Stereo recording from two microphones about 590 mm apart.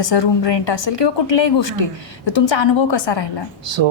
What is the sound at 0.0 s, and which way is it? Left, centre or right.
A woman's voice, left.